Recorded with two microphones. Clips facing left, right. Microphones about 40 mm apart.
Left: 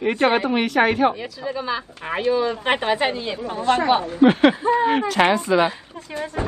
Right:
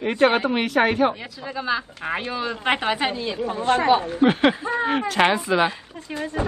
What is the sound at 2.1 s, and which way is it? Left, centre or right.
Speech, right.